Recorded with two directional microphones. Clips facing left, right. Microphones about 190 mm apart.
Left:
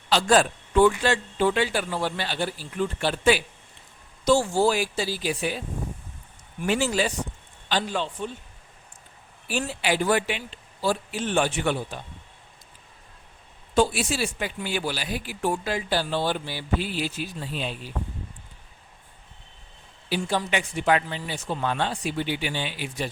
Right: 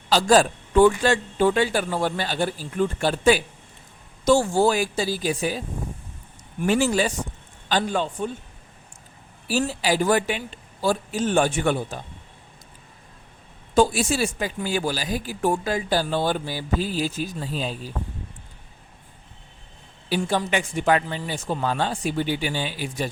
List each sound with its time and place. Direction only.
0.1 s speech: 40° right (ahead or behind)
9.5 s speech: 40° right (ahead or behind)
13.7 s speech: 45° right (ahead or behind)
20.1 s speech: 45° right (ahead or behind)